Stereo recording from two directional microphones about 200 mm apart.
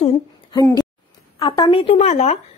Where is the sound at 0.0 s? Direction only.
20° left (ahead or behind).